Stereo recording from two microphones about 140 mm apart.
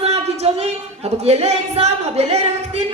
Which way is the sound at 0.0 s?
45° right (ahead or behind).